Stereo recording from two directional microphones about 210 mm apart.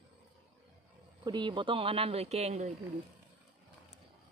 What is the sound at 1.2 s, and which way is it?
A man's voice, 20° right (ahead or behind).